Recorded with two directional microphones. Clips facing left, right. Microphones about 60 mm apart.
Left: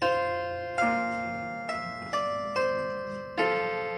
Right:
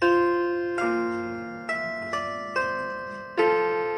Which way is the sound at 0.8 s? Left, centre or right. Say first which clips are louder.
Right 2 dB; centre.